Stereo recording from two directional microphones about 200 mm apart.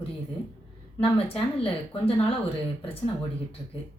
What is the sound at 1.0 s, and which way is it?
Speech, 30° left (ahead or behind).